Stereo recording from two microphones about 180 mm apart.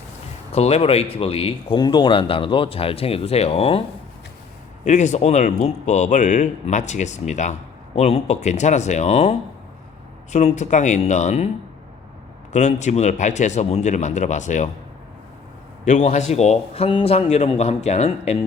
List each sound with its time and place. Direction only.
0.5 s speech: 35° left (ahead or behind)
4.9 s speech: 40° left (ahead or behind)
12.5 s speech: 40° left (ahead or behind)
15.8 s speech: 40° left (ahead or behind)